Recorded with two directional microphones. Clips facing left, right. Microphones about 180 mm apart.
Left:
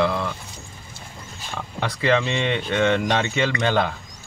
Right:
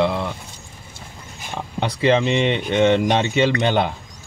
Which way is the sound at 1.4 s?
20° right (ahead or behind).